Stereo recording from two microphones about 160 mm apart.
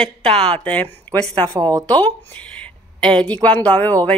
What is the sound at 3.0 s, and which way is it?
A woman's voice, 5° left (ahead or behind).